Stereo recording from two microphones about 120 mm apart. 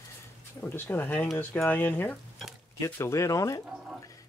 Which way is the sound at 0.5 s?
15° left (ahead or behind).